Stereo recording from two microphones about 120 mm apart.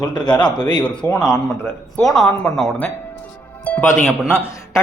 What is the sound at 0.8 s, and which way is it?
A man's voice, 10° left (ahead or behind).